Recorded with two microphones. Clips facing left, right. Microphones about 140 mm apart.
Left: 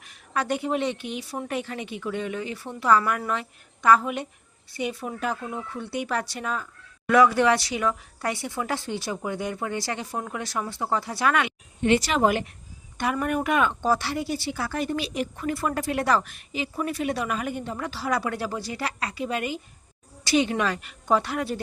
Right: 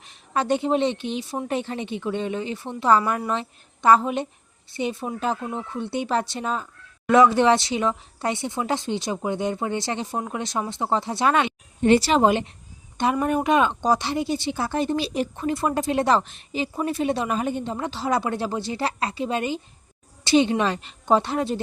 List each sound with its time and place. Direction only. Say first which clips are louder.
0.0 s a woman's voice: right 3 dB; 25° right (ahead or behind)